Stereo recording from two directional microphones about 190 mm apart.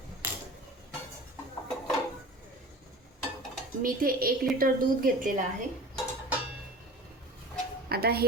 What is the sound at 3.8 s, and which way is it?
A woman's voice, 50° right (ahead or behind).